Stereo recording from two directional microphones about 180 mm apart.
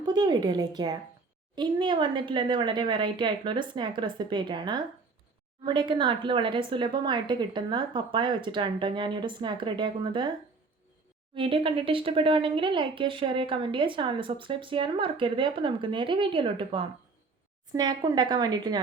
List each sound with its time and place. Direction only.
0.0 s speech: 25° right (ahead or behind)
11.3 s speech: 30° right (ahead or behind)